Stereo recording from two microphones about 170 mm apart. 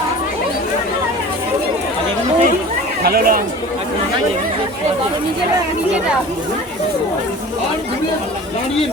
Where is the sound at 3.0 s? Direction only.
65° right (ahead or behind).